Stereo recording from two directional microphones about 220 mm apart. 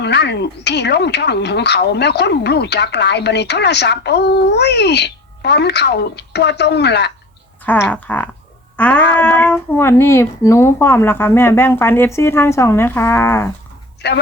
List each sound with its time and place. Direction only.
0.0 s speech: 50° left (ahead or behind)
7.6 s speech: 5° left (ahead or behind)
14.0 s speech: 50° left (ahead or behind)